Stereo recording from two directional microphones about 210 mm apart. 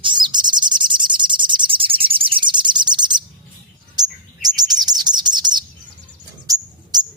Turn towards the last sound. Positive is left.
turn(degrees=-20)  # may be behind; listen again after turning